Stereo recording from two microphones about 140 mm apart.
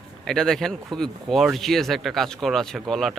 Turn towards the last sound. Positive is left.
turn(degrees=0)  # may be behind; listen again after turning